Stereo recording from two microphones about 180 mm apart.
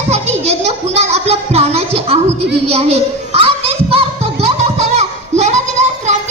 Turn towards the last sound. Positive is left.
turn(degrees=-40)  # may be behind; listen again after turning